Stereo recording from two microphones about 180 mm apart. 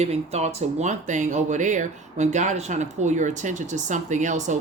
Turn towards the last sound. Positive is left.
turn(degrees=-45)  # may be behind; listen again after turning